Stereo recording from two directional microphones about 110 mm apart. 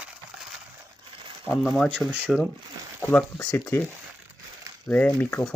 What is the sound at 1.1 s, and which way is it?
Crumpling, 50° right (ahead or behind).